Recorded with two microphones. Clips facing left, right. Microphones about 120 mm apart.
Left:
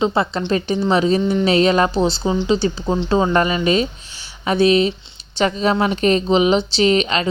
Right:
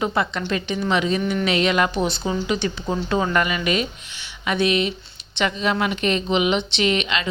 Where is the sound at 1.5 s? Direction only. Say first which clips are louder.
Left 5 dB; 35° left (ahead or behind).